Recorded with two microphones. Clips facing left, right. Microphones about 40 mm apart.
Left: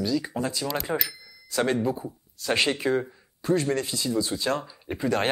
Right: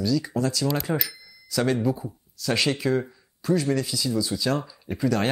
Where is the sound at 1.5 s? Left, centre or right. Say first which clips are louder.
Right 1 dB; left.